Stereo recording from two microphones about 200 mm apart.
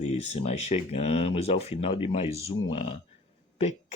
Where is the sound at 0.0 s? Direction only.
30° left (ahead or behind).